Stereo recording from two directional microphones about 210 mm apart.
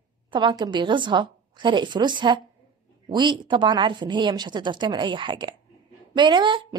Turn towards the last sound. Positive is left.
turn(degrees=-20)  # may be behind; listen again after turning